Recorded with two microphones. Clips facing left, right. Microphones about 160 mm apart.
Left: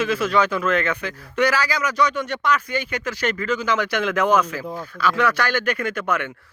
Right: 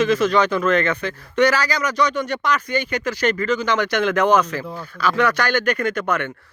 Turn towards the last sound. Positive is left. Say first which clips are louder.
# right 2 dB
turn(degrees=5)  # may be behind; listen again after turning